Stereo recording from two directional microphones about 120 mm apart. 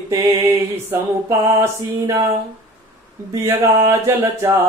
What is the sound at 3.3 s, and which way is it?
Mantra, 25° right (ahead or behind).